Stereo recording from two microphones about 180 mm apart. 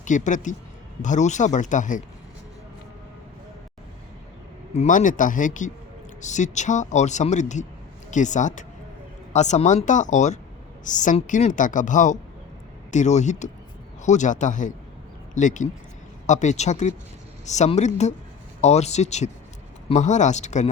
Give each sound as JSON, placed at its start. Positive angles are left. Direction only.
{"t": 0.0, "sound": "a woman's voice", "side_deg": 45}
{"t": 4.7, "sound": "a woman's voice", "side_deg": 40}